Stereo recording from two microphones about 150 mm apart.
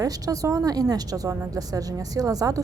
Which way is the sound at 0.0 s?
25° right (ahead or behind).